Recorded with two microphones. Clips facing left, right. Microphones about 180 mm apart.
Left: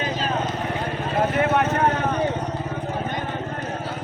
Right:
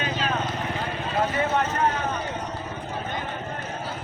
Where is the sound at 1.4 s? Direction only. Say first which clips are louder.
Left 4 dB; 65° left (ahead or behind).